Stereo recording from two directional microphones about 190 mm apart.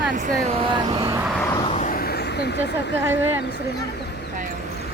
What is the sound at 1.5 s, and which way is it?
Vehicle, 30° left (ahead or behind).